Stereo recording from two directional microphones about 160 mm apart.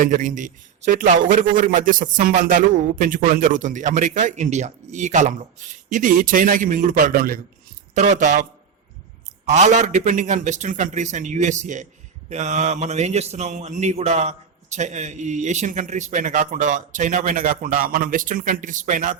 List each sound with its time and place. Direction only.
0.0 s a man's voice: 55° right (ahead or behind)
7.9 s a man's voice: 45° right (ahead or behind)
9.5 s a man's voice: 45° right (ahead or behind)